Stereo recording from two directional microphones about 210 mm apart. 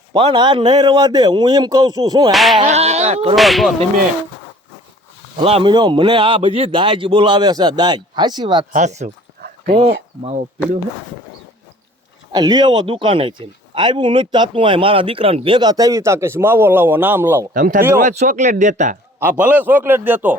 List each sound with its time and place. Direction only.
0.1 s speech: 20° right (ahead or behind)
2.3 s whip: centre (ahead or behind)
2.6 s speech: 30° right (ahead or behind)
3.3 s whip: centre (ahead or behind)
5.4 s speech: 25° right (ahead or behind)
8.7 s speech: 35° right (ahead or behind)
12.3 s speech: 20° right (ahead or behind)
17.5 s speech: 40° right (ahead or behind)
19.2 s a man's voice: 5° right (ahead or behind)